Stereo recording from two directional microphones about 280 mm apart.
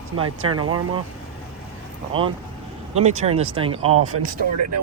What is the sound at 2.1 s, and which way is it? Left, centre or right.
Speech, centre.